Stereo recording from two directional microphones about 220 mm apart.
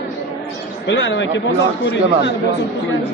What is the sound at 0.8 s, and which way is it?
Speech, 55° left (ahead or behind).